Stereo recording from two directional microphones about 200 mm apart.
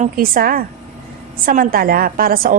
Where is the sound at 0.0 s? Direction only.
45° right (ahead or behind).